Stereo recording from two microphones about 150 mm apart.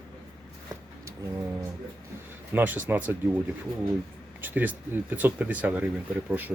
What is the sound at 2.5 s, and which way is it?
Speech, 10° right (ahead or behind).